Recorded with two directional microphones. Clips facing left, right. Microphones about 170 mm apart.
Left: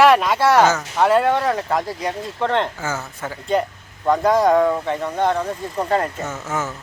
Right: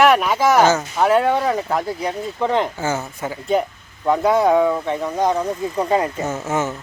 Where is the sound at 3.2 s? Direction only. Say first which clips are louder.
Even; 10° right (ahead or behind).